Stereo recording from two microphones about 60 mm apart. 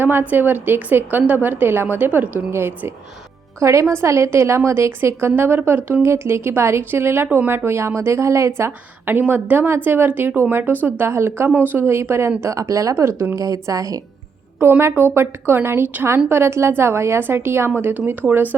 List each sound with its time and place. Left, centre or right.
0.0 s a woman's voice: right
2.5 s a woman's voice: right
3.6 s a woman's voice: right
9.0 s a woman's voice: right
11.0 s a woman's voice: right
12.4 s speech: right
13.3 s speech: right
14.6 s a woman's voice: right
17.7 s speech: right